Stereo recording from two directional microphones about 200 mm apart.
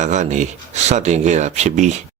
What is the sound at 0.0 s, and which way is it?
Speech, 35° right (ahead or behind).